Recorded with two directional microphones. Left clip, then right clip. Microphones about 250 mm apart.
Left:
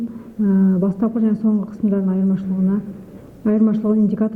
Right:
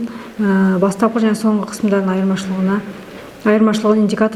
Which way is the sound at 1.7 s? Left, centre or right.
Centre.